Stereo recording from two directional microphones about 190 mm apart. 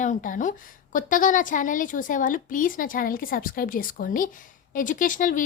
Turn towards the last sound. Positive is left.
turn(degrees=45)  # may be behind; listen again after turning